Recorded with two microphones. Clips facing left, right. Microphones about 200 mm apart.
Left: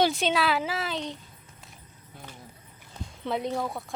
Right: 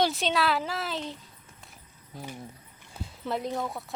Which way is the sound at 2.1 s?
35° right (ahead or behind).